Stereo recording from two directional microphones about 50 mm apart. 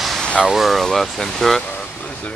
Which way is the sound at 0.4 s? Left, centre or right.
Centre.